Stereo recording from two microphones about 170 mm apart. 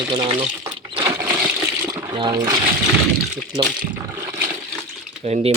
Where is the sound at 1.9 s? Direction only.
25° right (ahead or behind).